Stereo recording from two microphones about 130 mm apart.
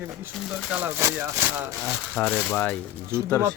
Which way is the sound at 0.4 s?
10° right (ahead or behind).